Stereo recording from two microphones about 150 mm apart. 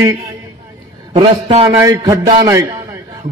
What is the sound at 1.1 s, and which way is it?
A man's voice, 35° right (ahead or behind).